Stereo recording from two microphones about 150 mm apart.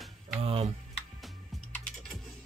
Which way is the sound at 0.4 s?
40° right (ahead or behind).